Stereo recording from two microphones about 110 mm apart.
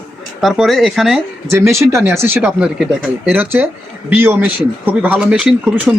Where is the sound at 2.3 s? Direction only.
5° right (ahead or behind).